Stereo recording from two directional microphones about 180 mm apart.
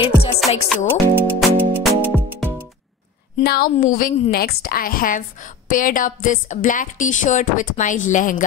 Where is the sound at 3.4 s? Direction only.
55° left (ahead or behind).